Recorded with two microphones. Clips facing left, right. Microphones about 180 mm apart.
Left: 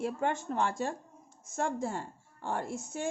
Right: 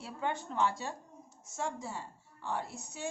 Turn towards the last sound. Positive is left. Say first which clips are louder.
# left 5 dB
turn(degrees=50)  # may be behind; listen again after turning